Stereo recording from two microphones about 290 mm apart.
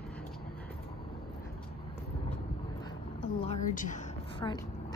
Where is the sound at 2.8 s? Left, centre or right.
Centre.